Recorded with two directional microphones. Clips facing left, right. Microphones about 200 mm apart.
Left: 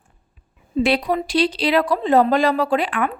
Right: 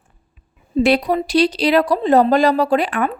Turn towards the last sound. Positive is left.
turn(degrees=-40)  # may be behind; listen again after turning